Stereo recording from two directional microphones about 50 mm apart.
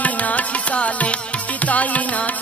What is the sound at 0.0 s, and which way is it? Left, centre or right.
Music, left.